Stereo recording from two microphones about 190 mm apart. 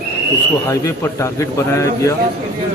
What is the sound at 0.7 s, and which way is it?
A man's voice, 15° left (ahead or behind).